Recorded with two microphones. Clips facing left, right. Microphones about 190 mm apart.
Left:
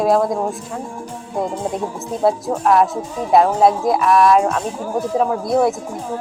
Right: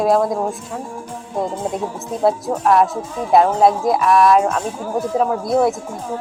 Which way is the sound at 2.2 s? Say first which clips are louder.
Even; centre (ahead or behind).